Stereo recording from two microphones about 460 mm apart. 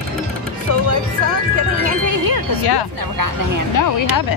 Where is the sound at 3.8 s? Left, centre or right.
Left.